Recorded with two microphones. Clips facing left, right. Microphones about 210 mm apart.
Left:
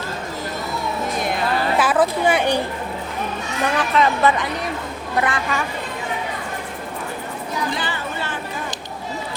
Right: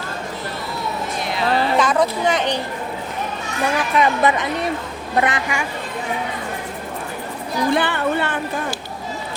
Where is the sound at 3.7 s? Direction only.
15° right (ahead or behind).